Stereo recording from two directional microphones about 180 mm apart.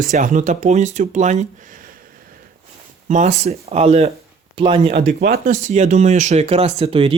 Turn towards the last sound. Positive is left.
turn(degrees=-30)  # may be behind; listen again after turning